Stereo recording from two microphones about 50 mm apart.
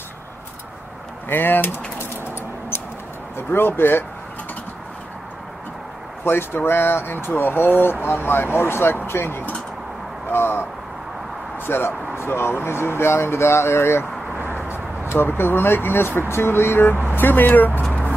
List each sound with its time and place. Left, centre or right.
1.3 s speech: left
2.0 s a sound: left
3.3 s speech: left
6.2 s speech: left
10.3 s vehicle: left
11.6 s speech: left